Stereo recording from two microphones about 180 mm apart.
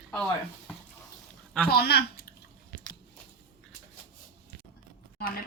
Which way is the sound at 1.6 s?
60° left (ahead or behind).